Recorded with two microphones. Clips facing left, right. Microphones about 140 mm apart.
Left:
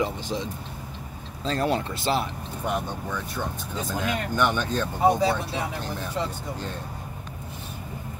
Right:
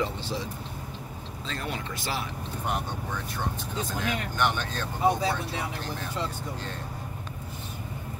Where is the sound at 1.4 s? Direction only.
35° left (ahead or behind).